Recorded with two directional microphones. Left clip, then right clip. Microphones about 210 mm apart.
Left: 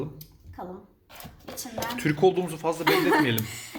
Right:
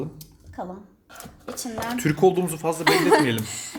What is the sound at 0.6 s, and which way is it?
Speech, 45° right (ahead or behind).